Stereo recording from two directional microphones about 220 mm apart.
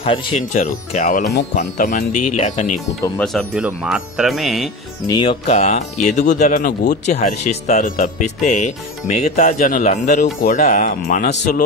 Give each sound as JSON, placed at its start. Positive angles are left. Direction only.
{"t": 0.0, "sound": "speech", "side_deg": 25}
{"t": 3.2, "sound": "speech", "side_deg": 5}
{"t": 5.0, "sound": "speech", "side_deg": 20}
{"t": 7.1, "sound": "speech", "side_deg": 30}